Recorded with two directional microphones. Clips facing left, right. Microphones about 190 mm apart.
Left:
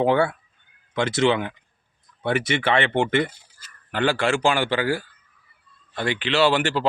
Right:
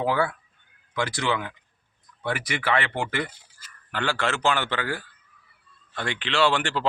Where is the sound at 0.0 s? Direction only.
25° left (ahead or behind).